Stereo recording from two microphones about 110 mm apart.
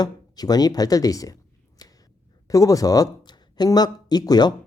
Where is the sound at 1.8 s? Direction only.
35° left (ahead or behind).